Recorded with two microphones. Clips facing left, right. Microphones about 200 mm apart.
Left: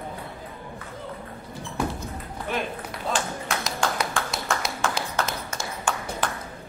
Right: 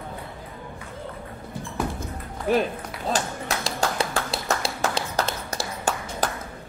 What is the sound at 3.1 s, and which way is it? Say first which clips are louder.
Clapping: right 1 dB; 35° right (ahead or behind).